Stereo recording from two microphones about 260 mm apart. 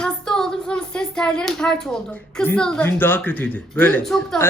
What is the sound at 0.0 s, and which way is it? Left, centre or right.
A woman's voice, centre.